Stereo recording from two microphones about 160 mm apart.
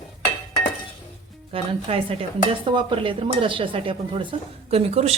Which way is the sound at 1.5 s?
35° right (ahead or behind).